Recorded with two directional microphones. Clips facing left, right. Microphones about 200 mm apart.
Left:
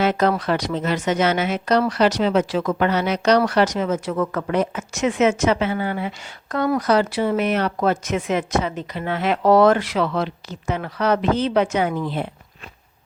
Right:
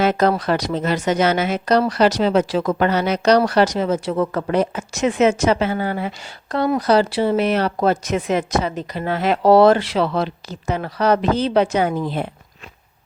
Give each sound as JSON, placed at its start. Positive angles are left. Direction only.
{"t": 0.0, "sound": "speech", "side_deg": -40}